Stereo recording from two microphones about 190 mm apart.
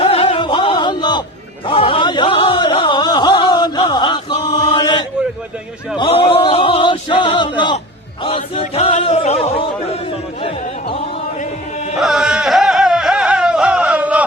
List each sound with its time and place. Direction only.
0.0 s music: 30° left (ahead or behind)
1.6 s a sound: 25° left (ahead or behind)
8.2 s chant: 30° left (ahead or behind)
11.9 s music: centre (ahead or behind)